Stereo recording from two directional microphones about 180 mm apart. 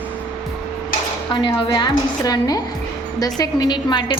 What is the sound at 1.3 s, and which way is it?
A woman's voice, 25° left (ahead or behind).